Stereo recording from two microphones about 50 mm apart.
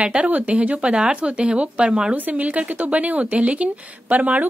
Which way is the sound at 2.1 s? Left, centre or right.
Right.